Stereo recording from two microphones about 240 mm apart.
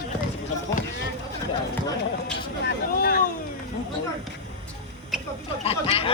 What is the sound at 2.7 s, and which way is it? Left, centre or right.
Speech, left.